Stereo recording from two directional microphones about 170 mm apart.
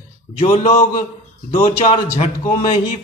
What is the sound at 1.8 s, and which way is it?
Speech, 35° left (ahead or behind).